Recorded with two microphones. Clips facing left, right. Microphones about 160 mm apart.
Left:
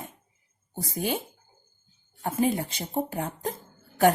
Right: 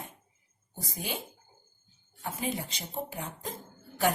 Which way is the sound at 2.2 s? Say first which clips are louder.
Left 9 dB; 50° left (ahead or behind).